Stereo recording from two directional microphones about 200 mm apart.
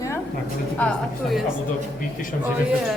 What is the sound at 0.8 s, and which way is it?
Speech, 5° left (ahead or behind).